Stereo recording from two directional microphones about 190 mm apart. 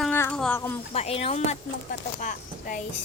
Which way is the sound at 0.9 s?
30° left (ahead or behind).